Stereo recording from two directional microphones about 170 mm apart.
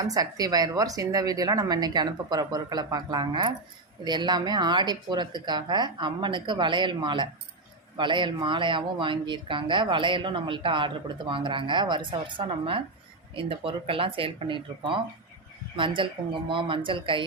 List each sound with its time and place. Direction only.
0.0 s speech: 20° right (ahead or behind)